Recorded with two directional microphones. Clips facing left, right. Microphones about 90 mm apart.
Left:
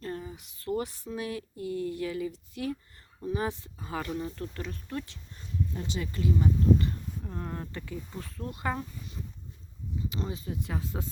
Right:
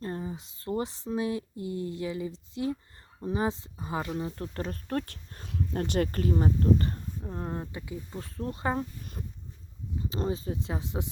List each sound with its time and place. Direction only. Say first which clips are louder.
0.0 s speech: right 2 dB; 25° right (ahead or behind)
4.5 s speech: right 5 dB; 40° right (ahead or behind)
5.5 s speech: right 3 dB; 70° right (ahead or behind); by 6.9 s 45° right (ahead or behind)
7.3 s speech: right 3 dB; 25° right (ahead or behind)
7.7 s speech: even; 15° right (ahead or behind)
8.1 s speech: right 3 dB; 35° right (ahead or behind)
10.0 s speech: right 5 dB; 35° right (ahead or behind); by 11.1 s 20° right (ahead or behind)